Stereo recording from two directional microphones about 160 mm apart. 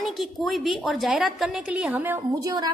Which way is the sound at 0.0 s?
Centre (ahead or behind).